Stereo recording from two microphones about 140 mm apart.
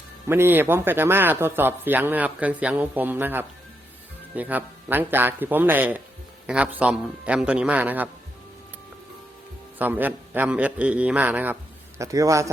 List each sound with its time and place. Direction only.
0.3 s speech: 15° right (ahead or behind)
9.7 s speech: 10° right (ahead or behind)
11.9 s a man's voice: 25° right (ahead or behind)